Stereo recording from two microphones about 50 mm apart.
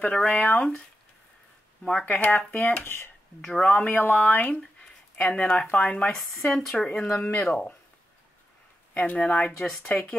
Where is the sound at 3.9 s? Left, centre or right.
Left.